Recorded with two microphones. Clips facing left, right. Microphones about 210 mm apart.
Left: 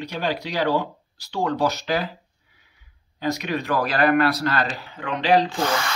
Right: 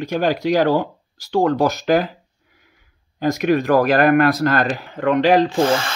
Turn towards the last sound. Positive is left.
turn(degrees=-30)  # may be behind; listen again after turning